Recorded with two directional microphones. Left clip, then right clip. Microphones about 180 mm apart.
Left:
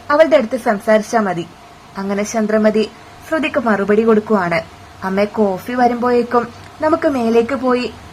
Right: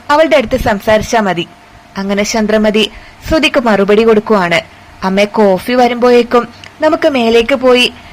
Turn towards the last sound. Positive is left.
turn(degrees=-20)  # may be behind; listen again after turning